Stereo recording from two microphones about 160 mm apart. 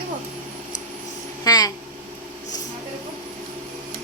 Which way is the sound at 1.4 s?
25° left (ahead or behind).